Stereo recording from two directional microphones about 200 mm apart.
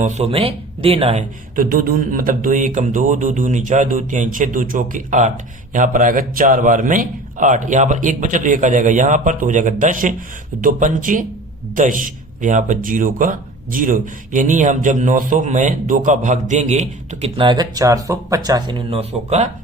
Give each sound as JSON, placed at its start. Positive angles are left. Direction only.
{"t": 0.0, "sound": "speech", "side_deg": -35}
{"t": 1.5, "sound": "speech", "side_deg": -45}